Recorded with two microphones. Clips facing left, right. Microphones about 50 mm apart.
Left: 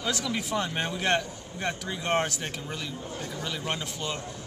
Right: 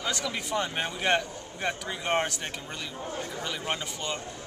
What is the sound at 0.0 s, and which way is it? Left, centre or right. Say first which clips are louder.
A man's voice: left 1 dB; centre.